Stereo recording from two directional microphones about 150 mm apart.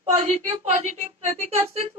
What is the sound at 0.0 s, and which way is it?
A woman's voice, 45° right (ahead or behind).